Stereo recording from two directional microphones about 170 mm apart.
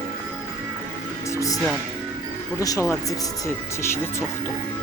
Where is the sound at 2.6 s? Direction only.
20° left (ahead or behind).